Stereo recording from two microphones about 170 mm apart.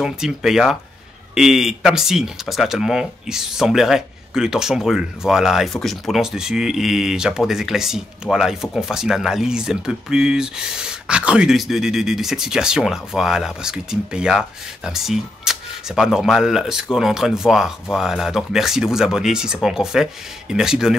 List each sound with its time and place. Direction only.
0.0 s speech: 5° right (ahead or behind)